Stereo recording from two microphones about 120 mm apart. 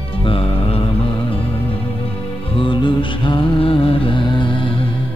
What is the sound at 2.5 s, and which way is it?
Music, 45° left (ahead or behind).